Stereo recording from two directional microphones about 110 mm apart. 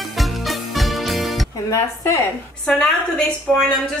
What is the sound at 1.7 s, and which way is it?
Speech, 30° left (ahead or behind).